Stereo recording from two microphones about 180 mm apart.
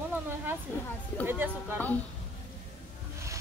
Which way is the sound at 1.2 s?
10° right (ahead or behind).